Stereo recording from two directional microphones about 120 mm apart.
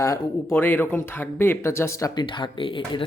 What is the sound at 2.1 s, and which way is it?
Speech, 40° left (ahead or behind).